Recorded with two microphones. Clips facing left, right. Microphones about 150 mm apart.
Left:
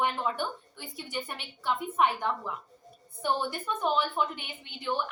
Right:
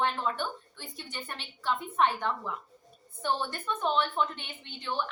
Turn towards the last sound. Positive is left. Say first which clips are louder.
# left 2 dB
turn(degrees=10)  # may be behind; listen again after turning